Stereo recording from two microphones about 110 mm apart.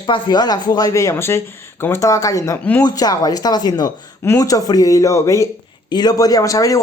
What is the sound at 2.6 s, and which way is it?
Speech, 15° left (ahead or behind).